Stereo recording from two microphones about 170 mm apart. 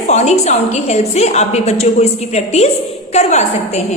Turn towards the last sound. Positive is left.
turn(degrees=40)  # may be behind; listen again after turning